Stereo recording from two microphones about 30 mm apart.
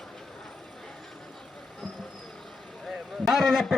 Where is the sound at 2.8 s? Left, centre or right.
Centre.